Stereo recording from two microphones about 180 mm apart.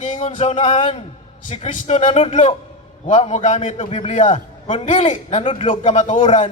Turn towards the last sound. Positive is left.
turn(degrees=40)  # may be behind; listen again after turning